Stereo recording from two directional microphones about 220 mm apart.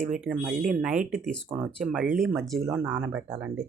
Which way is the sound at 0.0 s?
Centre (ahead or behind).